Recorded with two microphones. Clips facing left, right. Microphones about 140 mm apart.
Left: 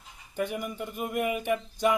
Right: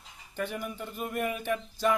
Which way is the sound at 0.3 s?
10° left (ahead or behind).